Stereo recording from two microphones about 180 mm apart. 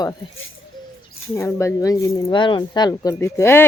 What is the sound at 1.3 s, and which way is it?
Speech, 15° left (ahead or behind).